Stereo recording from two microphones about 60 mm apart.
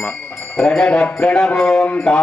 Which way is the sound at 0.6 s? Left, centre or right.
Centre.